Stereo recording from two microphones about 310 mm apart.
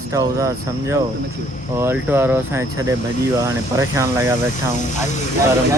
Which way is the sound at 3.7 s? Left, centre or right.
Centre.